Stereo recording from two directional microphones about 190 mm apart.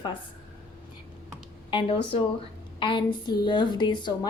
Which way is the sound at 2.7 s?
25° left (ahead or behind).